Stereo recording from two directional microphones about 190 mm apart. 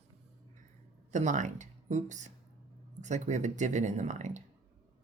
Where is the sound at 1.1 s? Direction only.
40° right (ahead or behind).